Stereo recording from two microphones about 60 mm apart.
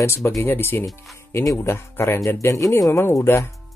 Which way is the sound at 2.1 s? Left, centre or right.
Left.